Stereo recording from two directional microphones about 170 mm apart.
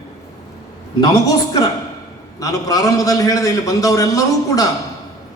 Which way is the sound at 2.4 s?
20° left (ahead or behind).